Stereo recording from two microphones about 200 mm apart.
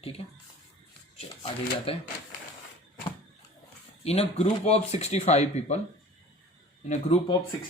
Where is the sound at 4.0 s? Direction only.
30° left (ahead or behind).